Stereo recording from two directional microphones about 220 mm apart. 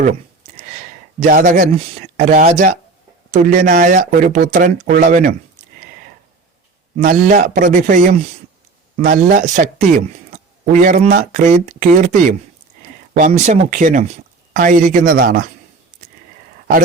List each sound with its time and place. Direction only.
1.2 s speech: 35° right (ahead or behind)
6.9 s speech: 35° right (ahead or behind)